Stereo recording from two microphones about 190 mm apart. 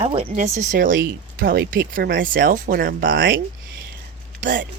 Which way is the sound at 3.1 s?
75° right (ahead or behind).